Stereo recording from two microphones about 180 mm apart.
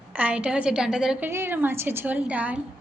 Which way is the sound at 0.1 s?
10° right (ahead or behind).